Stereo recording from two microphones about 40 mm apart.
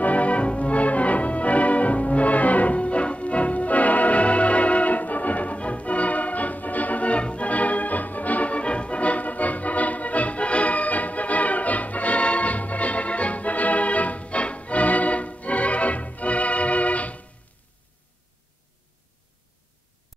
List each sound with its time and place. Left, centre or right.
0.0 s music: left